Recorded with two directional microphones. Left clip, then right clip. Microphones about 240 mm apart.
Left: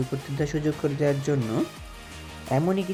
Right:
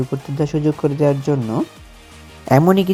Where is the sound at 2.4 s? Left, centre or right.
Right.